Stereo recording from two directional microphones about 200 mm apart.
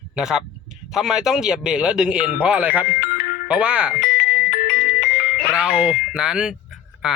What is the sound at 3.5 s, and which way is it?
Speech, 5° right (ahead or behind).